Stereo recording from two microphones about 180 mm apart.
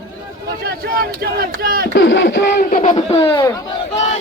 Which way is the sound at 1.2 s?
55° right (ahead or behind).